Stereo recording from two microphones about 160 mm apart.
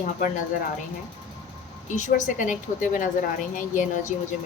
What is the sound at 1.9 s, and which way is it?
A woman's voice, 50° left (ahead or behind).